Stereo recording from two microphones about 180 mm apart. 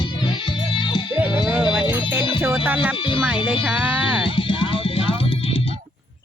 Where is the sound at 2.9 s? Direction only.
30° left (ahead or behind).